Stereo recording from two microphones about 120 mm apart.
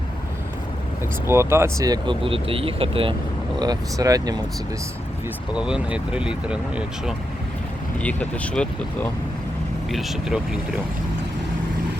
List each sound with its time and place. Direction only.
1.3 s speech: 20° right (ahead or behind)
1.9 s speech: 45° right (ahead or behind)
3.6 s speech: 30° right (ahead or behind)
5.5 s speech: 10° right (ahead or behind)
8.0 s speech: 10° left (ahead or behind)
9.9 s speech: centre (ahead or behind)